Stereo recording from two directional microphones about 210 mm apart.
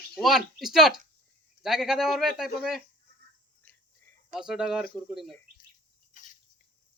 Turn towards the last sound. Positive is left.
turn(degrees=35)  # may be behind; listen again after turning